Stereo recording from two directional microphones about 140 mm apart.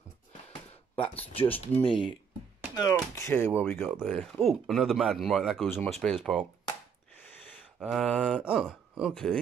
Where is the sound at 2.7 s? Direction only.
25° left (ahead or behind).